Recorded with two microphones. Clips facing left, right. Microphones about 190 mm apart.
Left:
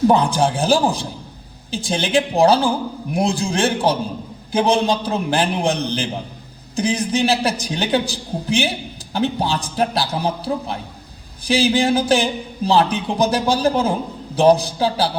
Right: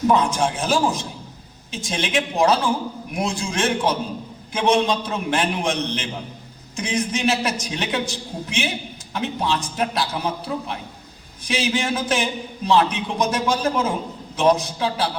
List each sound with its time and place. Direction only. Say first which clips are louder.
0.1 s speech: left 3 dB; 35° left (ahead or behind)